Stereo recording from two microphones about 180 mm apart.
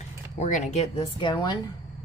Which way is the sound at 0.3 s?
40° left (ahead or behind).